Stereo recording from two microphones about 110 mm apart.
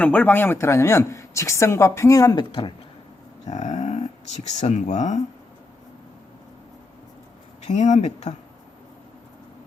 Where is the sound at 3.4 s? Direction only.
90° left.